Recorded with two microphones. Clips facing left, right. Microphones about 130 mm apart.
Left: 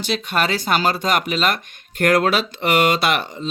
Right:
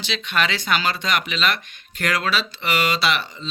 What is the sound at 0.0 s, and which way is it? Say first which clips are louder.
Speech: left 3 dB; 45° left (ahead or behind).